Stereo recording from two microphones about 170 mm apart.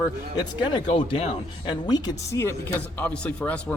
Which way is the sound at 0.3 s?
25° left (ahead or behind).